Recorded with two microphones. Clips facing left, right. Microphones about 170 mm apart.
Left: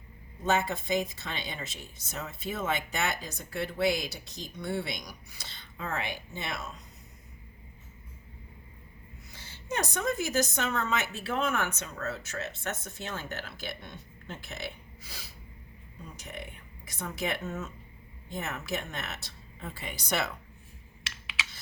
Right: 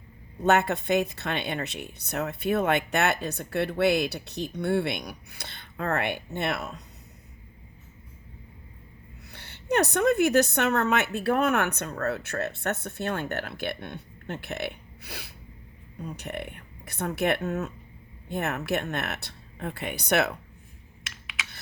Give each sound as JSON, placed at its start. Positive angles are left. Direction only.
{"t": 0.4, "sound": "speech", "side_deg": -65}
{"t": 9.3, "sound": "speech", "side_deg": -65}